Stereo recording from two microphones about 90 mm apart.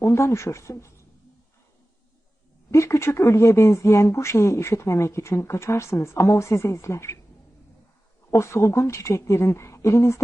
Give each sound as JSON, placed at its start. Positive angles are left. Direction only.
{"t": 0.0, "sound": "speech", "side_deg": 30}
{"t": 2.7, "sound": "speech", "side_deg": 30}
{"t": 8.3, "sound": "speech", "side_deg": 30}